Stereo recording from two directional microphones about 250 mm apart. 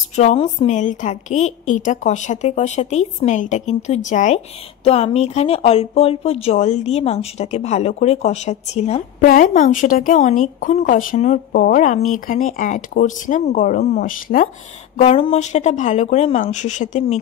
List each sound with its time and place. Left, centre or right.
0.1 s speech: left
15.0 s speech: left